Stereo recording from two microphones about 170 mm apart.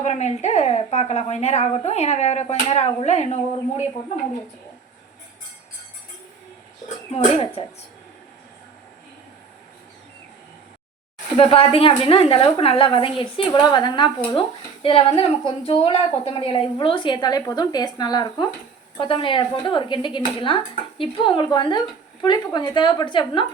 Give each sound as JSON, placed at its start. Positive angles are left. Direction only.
{"t": 0.0, "sound": "a woman's voice", "side_deg": 40}
{"t": 6.8, "sound": "speech", "side_deg": 40}
{"t": 11.3, "sound": "a woman's voice", "side_deg": 30}